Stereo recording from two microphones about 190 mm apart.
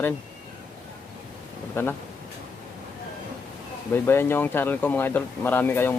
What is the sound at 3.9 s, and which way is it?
Speech, 10° left (ahead or behind).